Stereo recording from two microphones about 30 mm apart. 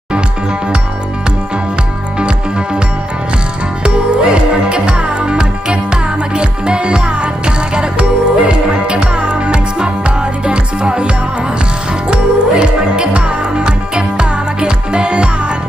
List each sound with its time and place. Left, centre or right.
2.1 s music: right
3.8 s music: right
12.1 s music: right